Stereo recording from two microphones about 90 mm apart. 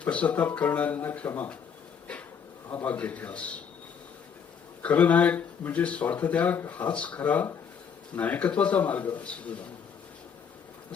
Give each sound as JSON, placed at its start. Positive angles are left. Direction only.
{"t": 0.0, "sound": "speech", "side_deg": 15}
{"t": 2.6, "sound": "speech", "side_deg": 20}
{"t": 4.8, "sound": "speech", "side_deg": 15}